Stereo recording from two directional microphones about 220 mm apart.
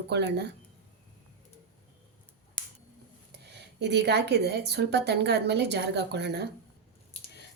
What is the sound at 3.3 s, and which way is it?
Speech, 50° right (ahead or behind).